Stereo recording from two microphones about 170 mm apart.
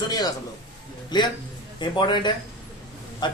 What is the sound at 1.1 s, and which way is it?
A man's voice, 25° left (ahead or behind).